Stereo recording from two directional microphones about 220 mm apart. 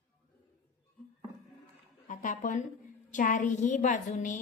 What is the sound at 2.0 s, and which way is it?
A woman's voice, 35° left (ahead or behind).